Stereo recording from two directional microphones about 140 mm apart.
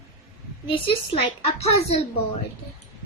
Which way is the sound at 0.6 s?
40° left (ahead or behind).